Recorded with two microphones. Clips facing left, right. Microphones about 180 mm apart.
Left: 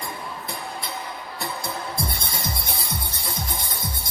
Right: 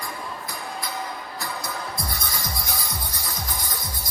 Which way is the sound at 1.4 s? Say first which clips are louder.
Left 3 dB; 25° left (ahead or behind).